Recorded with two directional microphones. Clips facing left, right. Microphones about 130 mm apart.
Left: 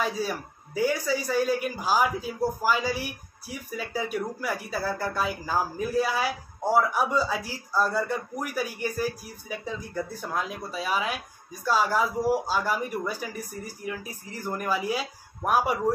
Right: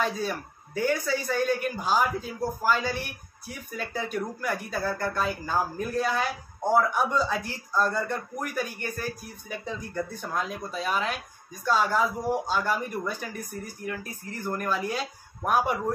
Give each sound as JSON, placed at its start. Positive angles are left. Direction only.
{"t": 0.0, "sound": "a man's voice", "side_deg": 5}